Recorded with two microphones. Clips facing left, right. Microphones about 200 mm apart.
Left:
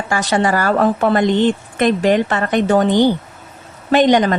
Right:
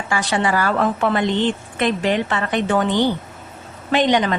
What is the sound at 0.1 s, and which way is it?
A woman's voice, 40° left (ahead or behind).